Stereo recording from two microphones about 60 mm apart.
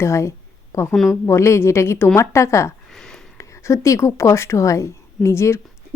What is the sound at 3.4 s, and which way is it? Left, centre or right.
A woman's voice, left.